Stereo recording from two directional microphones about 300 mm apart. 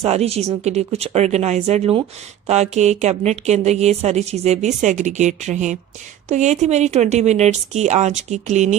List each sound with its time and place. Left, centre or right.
0.0 s speech: right